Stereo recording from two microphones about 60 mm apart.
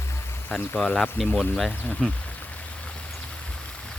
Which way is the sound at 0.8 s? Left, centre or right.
Centre.